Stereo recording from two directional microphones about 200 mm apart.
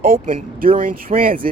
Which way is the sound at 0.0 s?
45° right (ahead or behind).